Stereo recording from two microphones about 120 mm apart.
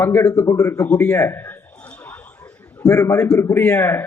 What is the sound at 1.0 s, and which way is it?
Speech, 15° left (ahead or behind).